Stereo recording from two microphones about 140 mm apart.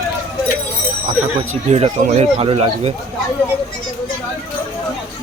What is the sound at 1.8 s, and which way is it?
Speech, 40° right (ahead or behind).